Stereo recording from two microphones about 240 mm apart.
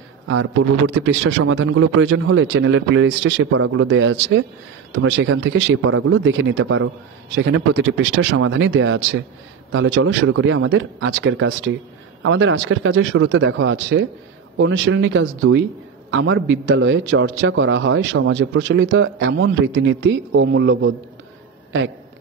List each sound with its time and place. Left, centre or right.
0.3 s a man's voice: right